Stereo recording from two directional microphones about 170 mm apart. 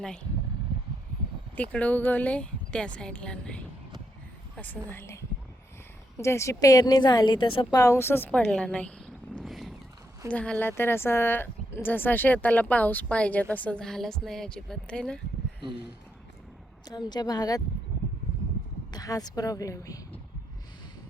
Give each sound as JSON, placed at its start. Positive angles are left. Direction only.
{"t": 1.7, "sound": "a woman's voice", "side_deg": 10}
{"t": 9.3, "sound": "horse", "side_deg": 0}
{"t": 10.3, "sound": "speech", "side_deg": 5}
{"t": 17.1, "sound": "a woman's voice", "side_deg": 25}
{"t": 18.9, "sound": "a woman's voice", "side_deg": 20}